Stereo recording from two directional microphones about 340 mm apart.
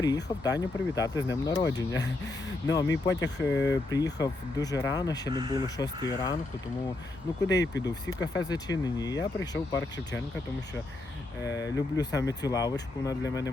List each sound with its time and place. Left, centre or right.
0.0 s speech: centre
3.1 s speech: left
3.4 s speech: centre
5.3 s speech: centre
5.7 s speech: centre
7.4 s speech: centre
11.4 s speech: centre